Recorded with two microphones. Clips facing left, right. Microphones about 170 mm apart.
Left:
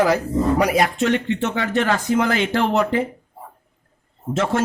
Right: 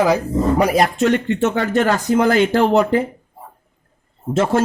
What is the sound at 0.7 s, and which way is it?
Speech, 40° right (ahead or behind).